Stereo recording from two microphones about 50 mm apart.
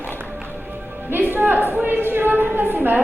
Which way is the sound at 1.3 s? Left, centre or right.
Right.